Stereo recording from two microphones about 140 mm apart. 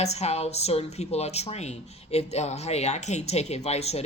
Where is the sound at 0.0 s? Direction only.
50° left (ahead or behind).